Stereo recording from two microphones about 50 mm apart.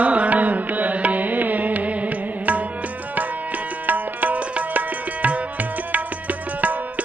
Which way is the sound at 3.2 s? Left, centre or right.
Right.